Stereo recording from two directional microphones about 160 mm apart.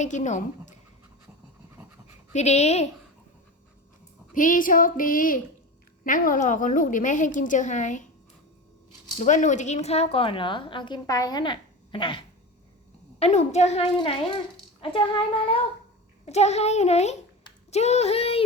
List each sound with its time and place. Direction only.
0.0 s a woman's voice: 50° left (ahead or behind)
2.3 s a woman's voice: 45° left (ahead or behind)
4.4 s a sound: 55° left (ahead or behind)
6.1 s a woman's voice: 60° left (ahead or behind)
9.1 s a woman's voice: 50° left (ahead or behind); by 12.2 s 30° left (ahead or behind)
13.1 s a woman's voice: 45° left (ahead or behind)